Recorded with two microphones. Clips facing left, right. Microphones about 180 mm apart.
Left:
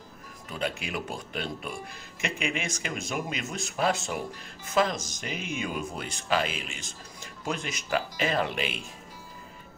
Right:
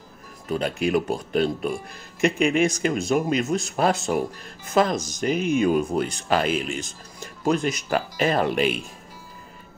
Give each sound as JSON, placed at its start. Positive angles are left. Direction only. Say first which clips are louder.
{"t": 0.5, "sound": "speech", "louder": "right 10 dB", "side_deg": -40}